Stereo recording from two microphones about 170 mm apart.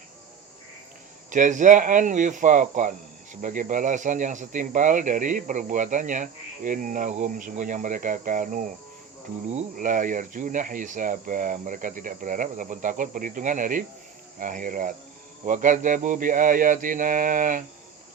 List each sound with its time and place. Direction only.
1.3 s speech: 45° right (ahead or behind)